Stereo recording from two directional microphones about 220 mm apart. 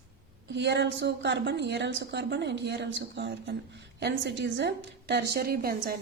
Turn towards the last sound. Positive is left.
turn(degrees=-45)  # may be behind; listen again after turning